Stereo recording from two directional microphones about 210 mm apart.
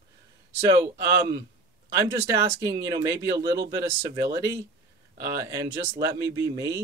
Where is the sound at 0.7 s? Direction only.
15° right (ahead or behind).